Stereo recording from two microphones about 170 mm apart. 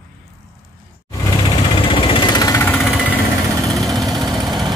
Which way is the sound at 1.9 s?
30° left (ahead or behind).